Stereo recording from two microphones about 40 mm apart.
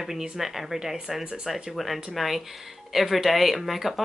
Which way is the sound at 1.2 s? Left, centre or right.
Right.